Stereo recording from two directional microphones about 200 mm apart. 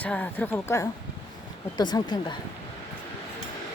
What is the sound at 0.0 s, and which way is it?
Speech, 10° left (ahead or behind).